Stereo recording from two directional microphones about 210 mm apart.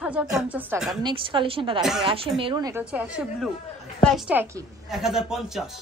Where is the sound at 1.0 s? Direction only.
25° right (ahead or behind); by 5.6 s centre (ahead or behind).